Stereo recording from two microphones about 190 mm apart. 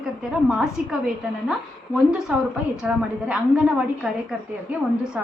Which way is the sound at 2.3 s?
10° right (ahead or behind).